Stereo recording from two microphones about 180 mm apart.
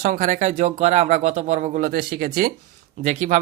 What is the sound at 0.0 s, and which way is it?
Speech, 45° right (ahead or behind).